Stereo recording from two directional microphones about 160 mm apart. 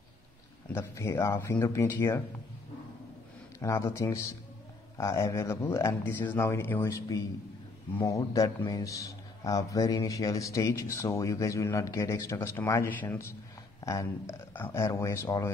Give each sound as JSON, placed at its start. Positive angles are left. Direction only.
{"t": 0.7, "sound": "speech", "side_deg": 15}
{"t": 3.5, "sound": "a man's voice", "side_deg": 20}